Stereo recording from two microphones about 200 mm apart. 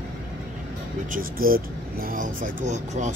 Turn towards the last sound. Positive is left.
turn(degrees=-35)  # may be behind; listen again after turning